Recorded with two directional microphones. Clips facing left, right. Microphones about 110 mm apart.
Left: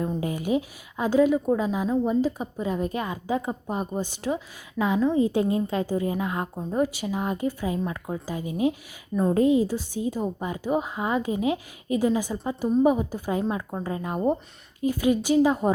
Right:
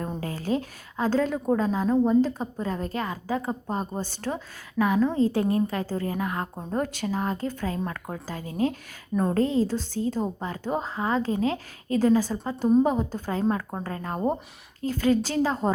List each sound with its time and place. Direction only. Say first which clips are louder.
0.2 s a sound: left 2 dB; 15° left (ahead or behind)
1.5 s a woman's voice: right 2 dB; 10° left (ahead or behind)
6.7 s speech: left 3 dB; 5° left (ahead or behind)